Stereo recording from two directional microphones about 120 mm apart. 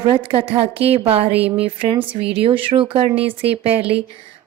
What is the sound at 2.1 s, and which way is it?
Speech, 50° right (ahead or behind).